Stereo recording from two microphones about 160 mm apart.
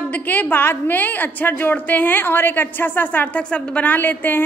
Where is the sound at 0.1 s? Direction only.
10° left (ahead or behind).